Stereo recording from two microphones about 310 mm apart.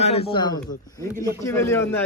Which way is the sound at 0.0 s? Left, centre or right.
Centre.